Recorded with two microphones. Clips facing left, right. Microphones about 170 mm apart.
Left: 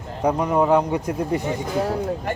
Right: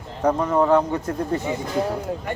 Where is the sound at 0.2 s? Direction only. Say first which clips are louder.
Even; 15° left (ahead or behind).